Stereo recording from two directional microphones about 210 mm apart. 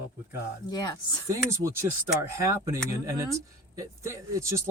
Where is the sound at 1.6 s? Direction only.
10° right (ahead or behind).